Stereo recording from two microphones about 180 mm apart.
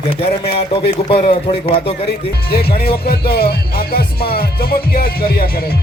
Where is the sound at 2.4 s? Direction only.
60° left (ahead or behind).